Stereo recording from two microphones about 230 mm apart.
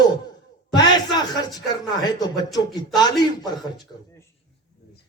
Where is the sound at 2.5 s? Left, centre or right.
Centre.